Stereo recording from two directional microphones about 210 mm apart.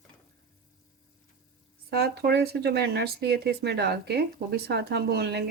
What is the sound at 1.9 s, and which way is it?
Speech, 50° right (ahead or behind).